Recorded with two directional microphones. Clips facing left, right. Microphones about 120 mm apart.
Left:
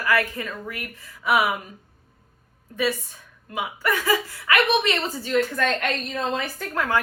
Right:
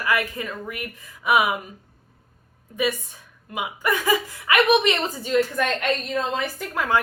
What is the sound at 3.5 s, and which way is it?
Speech, 15° right (ahead or behind).